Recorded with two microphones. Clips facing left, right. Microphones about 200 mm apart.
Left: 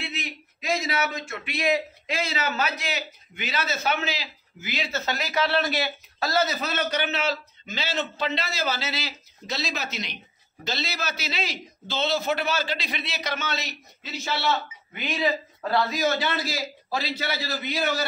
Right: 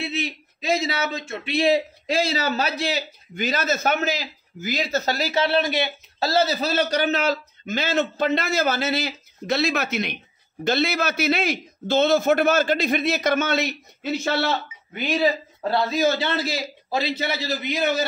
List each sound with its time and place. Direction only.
0.0 s a man's voice: 25° right (ahead or behind); by 14.5 s 55° right (ahead or behind)
15.0 s a man's voice: 40° right (ahead or behind); by 18.0 s 20° right (ahead or behind)